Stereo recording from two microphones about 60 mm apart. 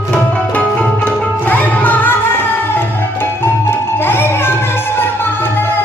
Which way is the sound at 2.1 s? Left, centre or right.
Left.